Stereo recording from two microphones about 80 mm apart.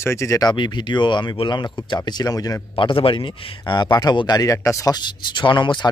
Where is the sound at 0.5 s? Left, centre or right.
Left.